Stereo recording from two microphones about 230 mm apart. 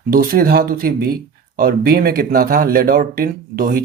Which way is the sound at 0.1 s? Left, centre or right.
Right.